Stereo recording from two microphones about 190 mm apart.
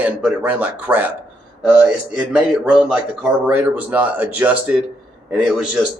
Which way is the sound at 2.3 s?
5° right (ahead or behind).